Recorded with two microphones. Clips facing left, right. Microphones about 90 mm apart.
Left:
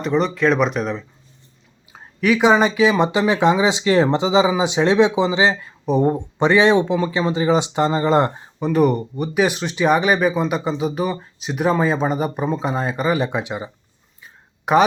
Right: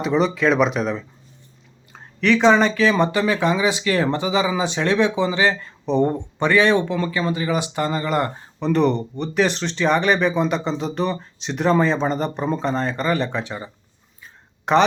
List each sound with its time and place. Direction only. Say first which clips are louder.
0.0 s speech: even; centre (ahead or behind); by 8.3 s 25° left (ahead or behind)
8.5 s speech: left 1 dB; 10° left (ahead or behind)
14.6 s a sound: left 1 dB; 5° left (ahead or behind)